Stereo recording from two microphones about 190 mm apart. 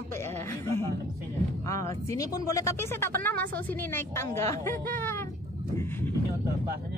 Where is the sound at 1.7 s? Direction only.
15° left (ahead or behind).